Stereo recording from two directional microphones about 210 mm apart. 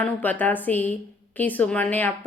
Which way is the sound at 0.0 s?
10° left (ahead or behind).